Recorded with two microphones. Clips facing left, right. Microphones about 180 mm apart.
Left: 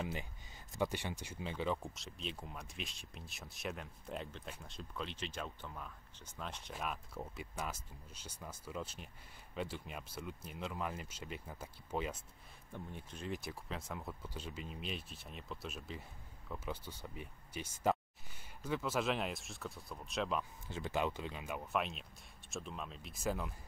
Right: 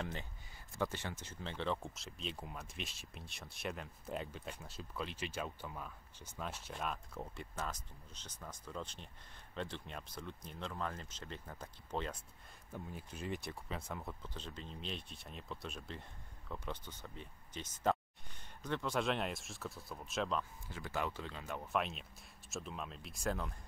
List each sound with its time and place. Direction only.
0.0 s speech: 10° left (ahead or behind)
12.7 s speech: 5° right (ahead or behind)
20.6 s speech: 20° left (ahead or behind); by 23.5 s 5° left (ahead or behind)